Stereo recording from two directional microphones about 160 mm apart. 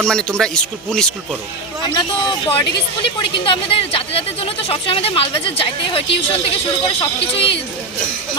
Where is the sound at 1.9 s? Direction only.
30° left (ahead or behind).